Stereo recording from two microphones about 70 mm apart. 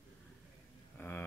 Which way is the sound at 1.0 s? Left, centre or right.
Left.